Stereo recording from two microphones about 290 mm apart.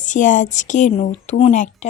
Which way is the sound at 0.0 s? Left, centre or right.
Left.